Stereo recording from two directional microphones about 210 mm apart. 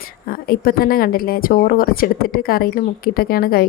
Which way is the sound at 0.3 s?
45° left (ahead or behind).